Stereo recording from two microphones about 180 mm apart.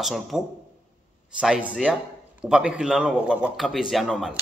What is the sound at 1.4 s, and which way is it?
A man's voice, 5° right (ahead or behind).